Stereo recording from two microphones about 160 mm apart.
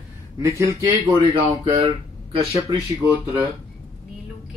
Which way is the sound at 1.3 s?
35° right (ahead or behind).